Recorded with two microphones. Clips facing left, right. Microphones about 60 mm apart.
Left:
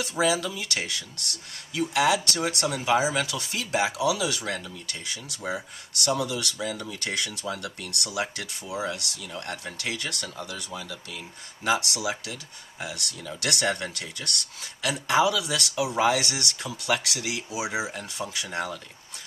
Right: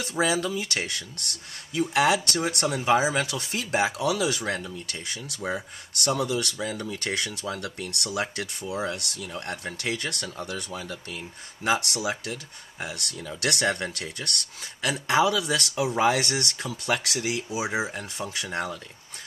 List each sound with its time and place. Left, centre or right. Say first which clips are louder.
0.0 s speech: even; right